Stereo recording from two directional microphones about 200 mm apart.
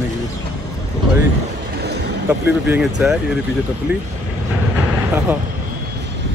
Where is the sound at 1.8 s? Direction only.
55° right (ahead or behind).